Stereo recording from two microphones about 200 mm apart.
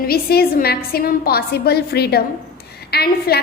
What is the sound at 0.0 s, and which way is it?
A woman's voice, 50° left (ahead or behind).